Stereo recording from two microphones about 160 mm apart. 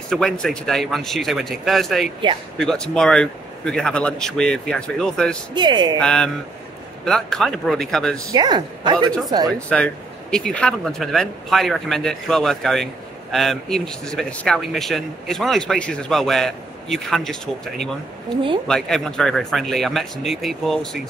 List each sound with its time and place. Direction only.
0.1 s speech: 5° left (ahead or behind)
5.5 s a woman's voice: 30° right (ahead or behind)
5.9 s speech: 5° left (ahead or behind)
8.3 s a woman's voice: 25° right (ahead or behind)
9.5 s speech: 5° left (ahead or behind)
18.3 s a woman's voice: 30° right (ahead or behind)
18.7 s speech: 5° left (ahead or behind)